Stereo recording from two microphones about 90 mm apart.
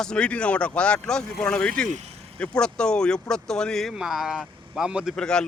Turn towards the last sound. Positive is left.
turn(degrees=10)  # may be behind; listen again after turning